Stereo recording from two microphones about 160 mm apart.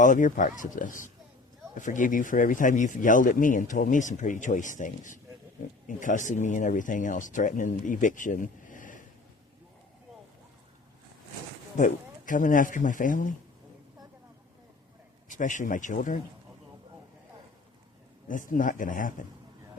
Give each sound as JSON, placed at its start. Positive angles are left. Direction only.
{"t": 0.0, "sound": "speech", "side_deg": 55}
{"t": 11.8, "sound": "speech", "side_deg": 55}
{"t": 15.3, "sound": "speech", "side_deg": 55}
{"t": 18.3, "sound": "speech", "side_deg": 55}